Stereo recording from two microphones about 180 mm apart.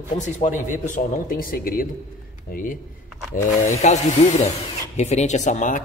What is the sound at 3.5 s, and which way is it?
A man's voice, 40° left (ahead or behind).